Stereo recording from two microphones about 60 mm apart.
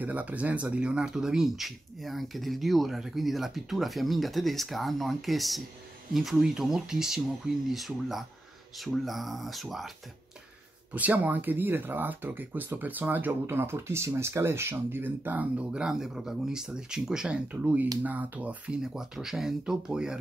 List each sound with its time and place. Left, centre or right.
0.0 s speech: right; by 9.9 s centre
10.9 s speech: right
15.7 s speech: centre
17.5 s speech: right
18.8 s speech: centre